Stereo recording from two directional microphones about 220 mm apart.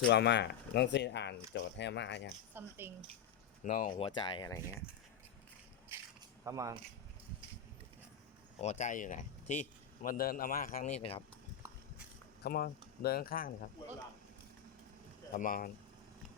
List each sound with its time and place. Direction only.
0.0 s speech: 50° left (ahead or behind)
2.5 s speech: 10° right (ahead or behind)
3.6 s speech: 35° left (ahead or behind)
3.9 s speech: 25° left (ahead or behind)
6.4 s speech: 15° right (ahead or behind)
8.6 s speech: 35° left (ahead or behind)
12.4 s speech: 45° left (ahead or behind)
15.3 s speech: 35° left (ahead or behind)